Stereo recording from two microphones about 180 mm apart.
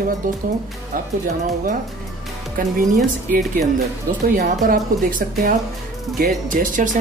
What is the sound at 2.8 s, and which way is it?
Speech, 45° right (ahead or behind).